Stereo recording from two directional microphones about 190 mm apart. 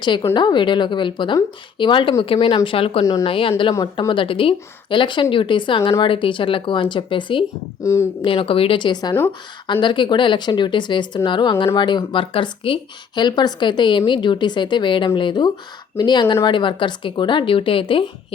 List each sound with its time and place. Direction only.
0.0 s a woman's voice: 25° left (ahead or behind)